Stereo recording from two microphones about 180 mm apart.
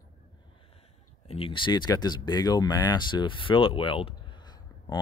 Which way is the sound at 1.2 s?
30° left (ahead or behind).